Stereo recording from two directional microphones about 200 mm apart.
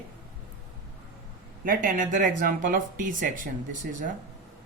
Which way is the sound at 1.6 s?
45° right (ahead or behind).